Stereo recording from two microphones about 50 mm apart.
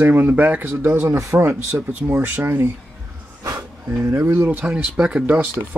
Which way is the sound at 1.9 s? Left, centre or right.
Right.